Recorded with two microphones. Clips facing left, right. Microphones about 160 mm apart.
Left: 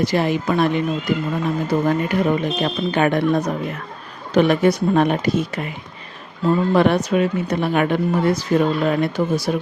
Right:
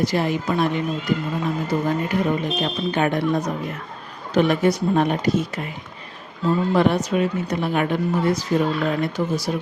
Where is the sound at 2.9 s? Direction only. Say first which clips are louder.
Left 3 dB; 70° left (ahead or behind).